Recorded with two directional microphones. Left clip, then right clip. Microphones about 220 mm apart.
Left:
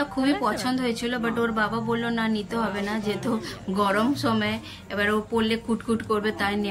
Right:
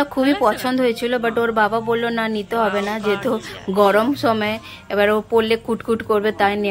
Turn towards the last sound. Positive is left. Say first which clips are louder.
# right 8 dB
turn(degrees=-20)  # may be behind; listen again after turning